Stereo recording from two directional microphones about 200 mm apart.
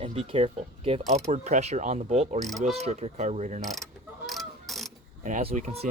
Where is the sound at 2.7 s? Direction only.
30° right (ahead or behind).